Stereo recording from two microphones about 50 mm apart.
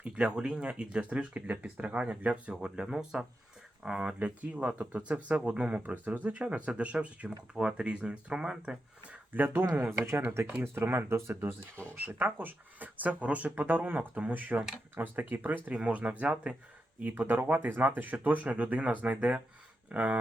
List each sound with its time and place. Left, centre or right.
0.0 s speech: right
1.3 s speech: right
4.4 s speech: right
9.7 s speech: right
12.2 s speech: right
17.0 s speech: right